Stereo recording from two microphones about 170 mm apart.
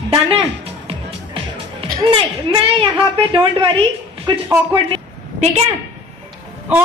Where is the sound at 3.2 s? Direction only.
30° right (ahead or behind).